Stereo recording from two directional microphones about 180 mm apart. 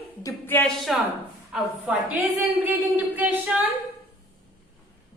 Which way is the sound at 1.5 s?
10° right (ahead or behind).